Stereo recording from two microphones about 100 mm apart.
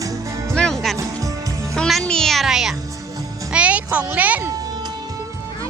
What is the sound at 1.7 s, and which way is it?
A child's voice, 5° left (ahead or behind).